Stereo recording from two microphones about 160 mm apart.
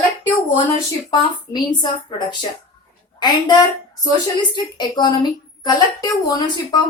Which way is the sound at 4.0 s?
20° left (ahead or behind).